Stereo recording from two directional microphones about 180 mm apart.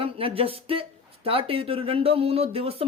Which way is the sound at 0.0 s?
30° right (ahead or behind).